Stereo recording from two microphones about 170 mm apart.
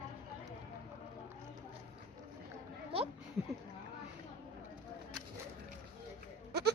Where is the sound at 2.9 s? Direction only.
35° right (ahead or behind).